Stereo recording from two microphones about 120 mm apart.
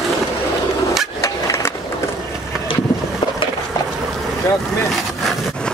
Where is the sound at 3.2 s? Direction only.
45° left (ahead or behind).